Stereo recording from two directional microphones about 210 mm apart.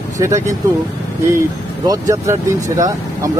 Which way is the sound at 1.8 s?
15° right (ahead or behind).